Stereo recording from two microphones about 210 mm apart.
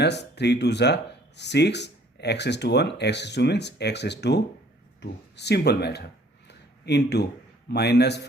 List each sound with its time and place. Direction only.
0.0 s speech: 55° left (ahead or behind)